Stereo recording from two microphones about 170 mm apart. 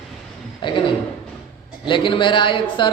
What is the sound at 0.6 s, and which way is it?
Speech, 30° left (ahead or behind).